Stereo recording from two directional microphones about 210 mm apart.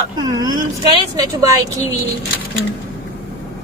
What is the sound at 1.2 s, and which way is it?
Speech, 15° right (ahead or behind).